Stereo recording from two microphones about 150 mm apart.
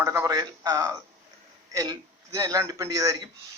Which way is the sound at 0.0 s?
20° right (ahead or behind).